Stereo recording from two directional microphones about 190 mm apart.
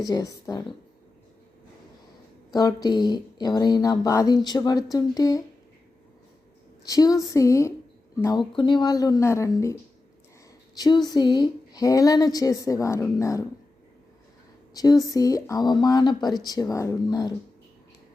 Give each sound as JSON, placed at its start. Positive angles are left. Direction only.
{"t": 0.0, "sound": "a woman's voice", "side_deg": 15}
{"t": 2.5, "sound": "speech", "side_deg": 20}
{"t": 6.8, "sound": "a woman's voice", "side_deg": 20}
{"t": 10.8, "sound": "speech", "side_deg": 20}
{"t": 14.7, "sound": "speech", "side_deg": 20}